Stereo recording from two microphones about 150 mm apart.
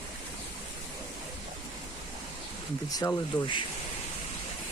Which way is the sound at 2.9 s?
25° left (ahead or behind).